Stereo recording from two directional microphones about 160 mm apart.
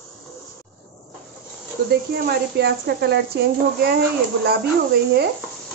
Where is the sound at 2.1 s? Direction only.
85° right.